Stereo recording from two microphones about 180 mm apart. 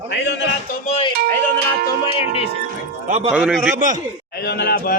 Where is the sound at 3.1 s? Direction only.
35° right (ahead or behind).